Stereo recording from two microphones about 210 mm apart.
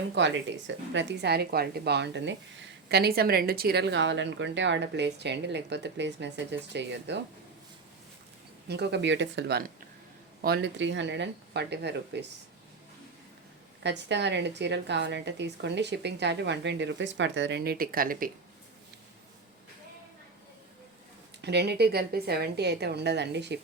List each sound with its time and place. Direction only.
0.1 s a woman's voice: 55° right (ahead or behind)
8.6 s a woman's voice: 50° right (ahead or behind)
13.8 s a woman's voice: 55° right (ahead or behind)
21.4 s a woman's voice: 50° right (ahead or behind)